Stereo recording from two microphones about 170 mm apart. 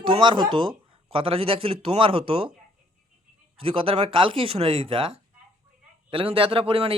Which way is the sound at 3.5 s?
35° right (ahead or behind).